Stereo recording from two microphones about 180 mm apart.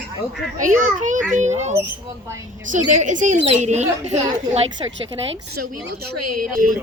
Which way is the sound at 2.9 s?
40° right (ahead or behind).